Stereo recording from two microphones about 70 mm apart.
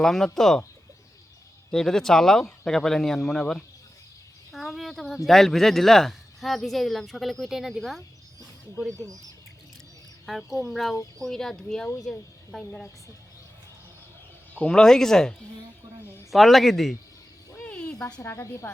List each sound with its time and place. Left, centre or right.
0.0 s speech: centre
1.7 s speech: centre
4.5 s speech: centre
10.2 s speech: centre
14.5 s speech: centre
17.7 s a sound: centre
18.2 s speech: left